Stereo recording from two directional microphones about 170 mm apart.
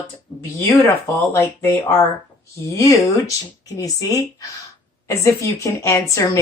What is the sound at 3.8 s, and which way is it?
A woman's voice, 20° left (ahead or behind).